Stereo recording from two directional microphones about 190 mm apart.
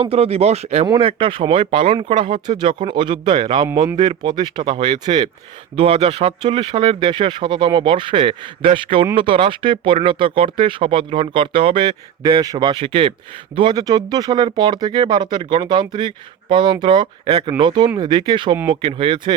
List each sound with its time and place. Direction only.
0.0 s speech: 30° right (ahead or behind)
3.7 s speech: 10° right (ahead or behind)
3.9 s speech: 20° right (ahead or behind)